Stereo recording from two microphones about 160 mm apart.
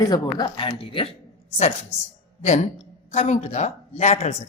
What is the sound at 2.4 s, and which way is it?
A woman's voice, 45° left (ahead or behind).